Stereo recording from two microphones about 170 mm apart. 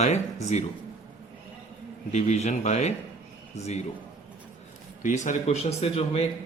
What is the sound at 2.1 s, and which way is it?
A man's voice, 40° left (ahead or behind).